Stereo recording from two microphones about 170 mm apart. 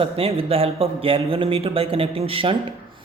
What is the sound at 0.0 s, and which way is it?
Speech, 35° right (ahead or behind).